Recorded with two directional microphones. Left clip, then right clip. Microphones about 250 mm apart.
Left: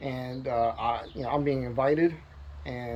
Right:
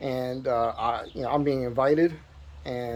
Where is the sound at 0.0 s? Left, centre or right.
Centre.